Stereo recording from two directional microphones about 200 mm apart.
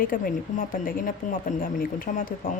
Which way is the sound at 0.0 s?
45° left (ahead or behind).